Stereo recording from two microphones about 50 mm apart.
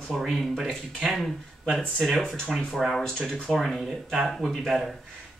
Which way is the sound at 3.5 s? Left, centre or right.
Centre.